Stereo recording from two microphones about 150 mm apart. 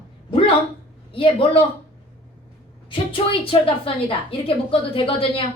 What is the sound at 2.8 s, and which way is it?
A woman's voice, 35° left (ahead or behind).